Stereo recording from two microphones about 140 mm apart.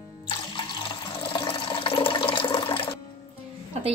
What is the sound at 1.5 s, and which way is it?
Water, 40° left (ahead or behind).